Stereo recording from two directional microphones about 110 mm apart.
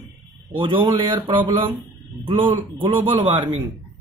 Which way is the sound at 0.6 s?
45° right (ahead or behind).